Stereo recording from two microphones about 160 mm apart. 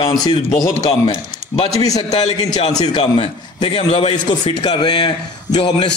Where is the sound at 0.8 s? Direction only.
40° left (ahead or behind).